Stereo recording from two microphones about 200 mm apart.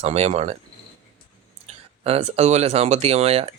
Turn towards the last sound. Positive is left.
turn(degrees=-30)  # may be behind; listen again after turning